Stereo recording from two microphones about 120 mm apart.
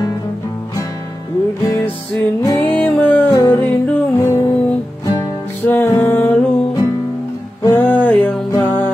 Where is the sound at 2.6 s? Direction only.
10° left (ahead or behind).